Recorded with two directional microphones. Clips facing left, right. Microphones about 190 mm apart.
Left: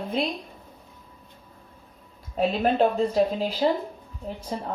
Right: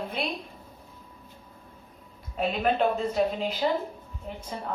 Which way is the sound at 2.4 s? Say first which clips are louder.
Left 3 dB; 35° left (ahead or behind).